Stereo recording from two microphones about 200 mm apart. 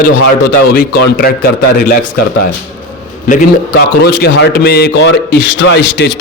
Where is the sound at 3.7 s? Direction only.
55° left (ahead or behind).